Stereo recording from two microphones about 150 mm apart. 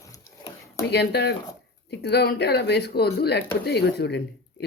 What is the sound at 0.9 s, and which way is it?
Speech, 90° left.